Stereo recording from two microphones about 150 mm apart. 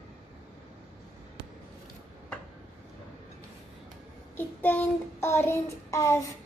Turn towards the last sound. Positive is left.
turn(degrees=20)  # may be behind; listen again after turning